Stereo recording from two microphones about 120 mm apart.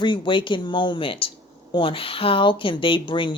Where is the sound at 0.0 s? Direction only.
40° left (ahead or behind).